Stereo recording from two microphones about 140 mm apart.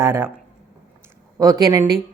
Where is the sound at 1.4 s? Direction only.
25° right (ahead or behind).